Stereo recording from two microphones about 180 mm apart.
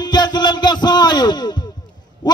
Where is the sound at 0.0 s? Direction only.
25° left (ahead or behind).